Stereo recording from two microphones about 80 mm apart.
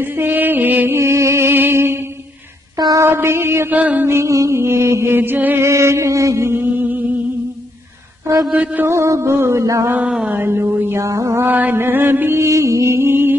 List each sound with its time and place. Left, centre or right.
0.0 s music: right
3.0 s mantra: right
4.1 s music: right
5.7 s mantra: right
8.5 s a sound: centre
8.8 s music: right
9.9 s a sound: centre
10.4 s music: right
11.0 s music: right
11.4 s music: right